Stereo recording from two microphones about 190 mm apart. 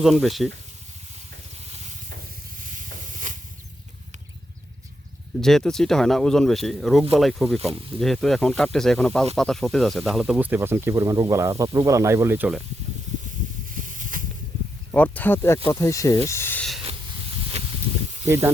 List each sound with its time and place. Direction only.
0.0 s speech: centre (ahead or behind)
2.0 s stir: 50° right (ahead or behind)
5.4 s speech: centre (ahead or behind)
13.7 s a sound: 45° right (ahead or behind)
14.9 s speech: 10° left (ahead or behind)
16.8 s hiss: 30° right (ahead or behind)